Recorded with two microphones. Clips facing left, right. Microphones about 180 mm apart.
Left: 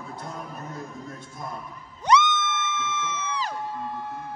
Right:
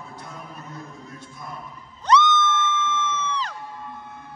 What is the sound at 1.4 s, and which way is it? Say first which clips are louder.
Dog: left 3 dB; 50° left (ahead or behind).